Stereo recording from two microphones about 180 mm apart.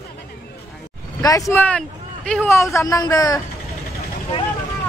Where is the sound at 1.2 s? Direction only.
20° left (ahead or behind).